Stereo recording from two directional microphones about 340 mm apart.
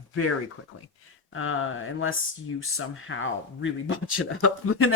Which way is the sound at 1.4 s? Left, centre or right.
Left.